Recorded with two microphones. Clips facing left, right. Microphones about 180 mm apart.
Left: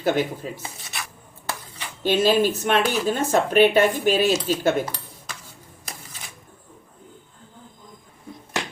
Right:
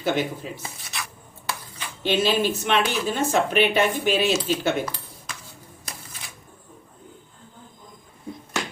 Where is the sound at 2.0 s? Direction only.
45° left (ahead or behind).